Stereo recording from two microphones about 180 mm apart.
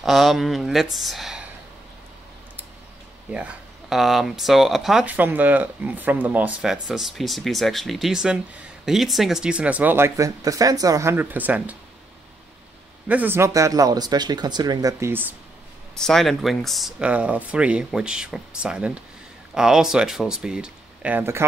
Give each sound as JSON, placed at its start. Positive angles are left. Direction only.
{"t": 0.0, "sound": "speech", "side_deg": 0}
{"t": 3.3, "sound": "speech", "side_deg": -5}
{"t": 13.1, "sound": "speech", "side_deg": -10}
{"t": 16.0, "sound": "speech", "side_deg": 0}